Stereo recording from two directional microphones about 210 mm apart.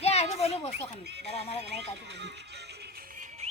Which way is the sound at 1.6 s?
55° right (ahead or behind).